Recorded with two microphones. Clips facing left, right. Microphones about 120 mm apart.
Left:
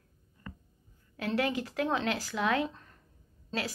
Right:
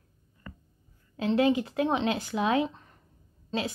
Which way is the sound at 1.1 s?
25° right (ahead or behind).